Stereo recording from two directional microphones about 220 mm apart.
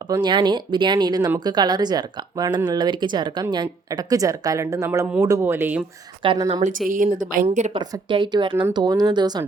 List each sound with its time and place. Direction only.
0.1 s speech: 20° right (ahead or behind)
6.2 s speech: 20° right (ahead or behind)
6.6 s a woman's voice: 35° right (ahead or behind); by 9.5 s 20° right (ahead or behind)